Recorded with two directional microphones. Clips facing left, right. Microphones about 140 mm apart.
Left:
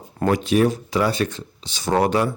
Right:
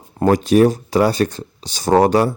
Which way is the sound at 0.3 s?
40° right (ahead or behind).